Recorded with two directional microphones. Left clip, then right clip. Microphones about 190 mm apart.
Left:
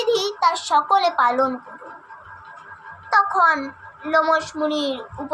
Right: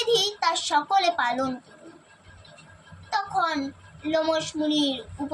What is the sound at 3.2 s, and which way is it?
A woman's voice, 10° left (ahead or behind).